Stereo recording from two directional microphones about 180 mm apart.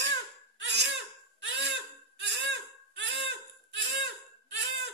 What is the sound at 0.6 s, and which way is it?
Laughter, 75° right (ahead or behind).